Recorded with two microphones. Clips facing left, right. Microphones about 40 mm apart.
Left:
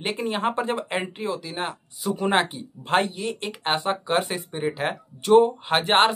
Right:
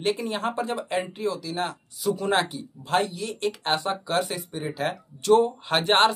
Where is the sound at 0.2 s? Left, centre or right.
Left.